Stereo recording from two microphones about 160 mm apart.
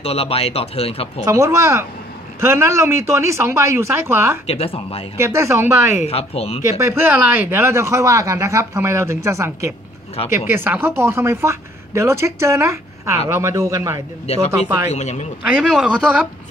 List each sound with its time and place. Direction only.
0.0 s speech: 40° left (ahead or behind)
1.2 s a man's voice: 20° right (ahead or behind)
4.5 s speech: 35° left (ahead or behind)
5.1 s speech: 15° right (ahead or behind)
5.9 s speech: 40° left (ahead or behind)
6.7 s speech: 15° right (ahead or behind)
9.7 s a sound: 40° left (ahead or behind)
10.3 s a woman's voice: 15° right (ahead or behind)
14.2 s speech: 40° left (ahead or behind)
15.4 s speech: 5° right (ahead or behind)